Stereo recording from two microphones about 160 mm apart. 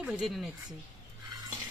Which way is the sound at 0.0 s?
Centre (ahead or behind).